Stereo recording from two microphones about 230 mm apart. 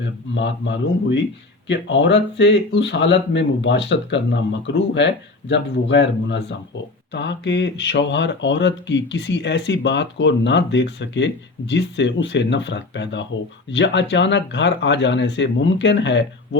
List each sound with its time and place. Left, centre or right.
0.3 s speech: left